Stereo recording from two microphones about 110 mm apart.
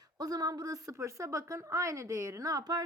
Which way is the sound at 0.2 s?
35° right (ahead or behind).